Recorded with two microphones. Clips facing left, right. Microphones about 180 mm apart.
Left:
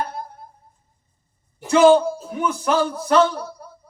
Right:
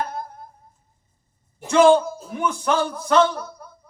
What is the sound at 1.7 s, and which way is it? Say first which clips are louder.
A man's voice: left 1 dB; 5° left (ahead or behind).